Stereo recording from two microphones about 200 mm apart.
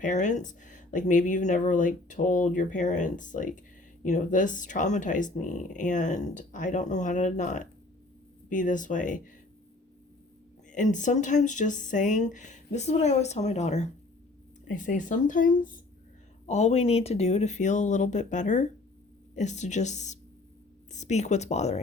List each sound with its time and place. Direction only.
0.0 s speech: 40° left (ahead or behind)
10.7 s speech: 40° left (ahead or behind)